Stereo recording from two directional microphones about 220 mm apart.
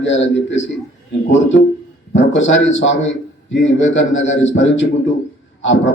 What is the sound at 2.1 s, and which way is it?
A man's voice, 60° left (ahead or behind).